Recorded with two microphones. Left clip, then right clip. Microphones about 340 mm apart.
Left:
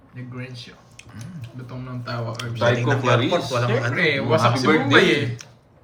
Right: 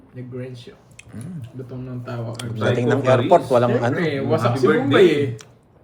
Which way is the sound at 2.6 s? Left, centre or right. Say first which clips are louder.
Right 1 dB; centre.